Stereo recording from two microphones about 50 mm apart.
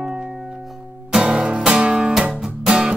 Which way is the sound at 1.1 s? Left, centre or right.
Centre.